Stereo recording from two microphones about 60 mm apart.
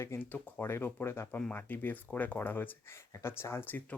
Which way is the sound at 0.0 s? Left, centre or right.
Left.